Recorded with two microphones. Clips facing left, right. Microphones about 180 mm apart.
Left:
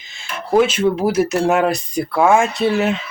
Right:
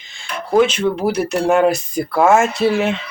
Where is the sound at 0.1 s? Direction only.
5° left (ahead or behind).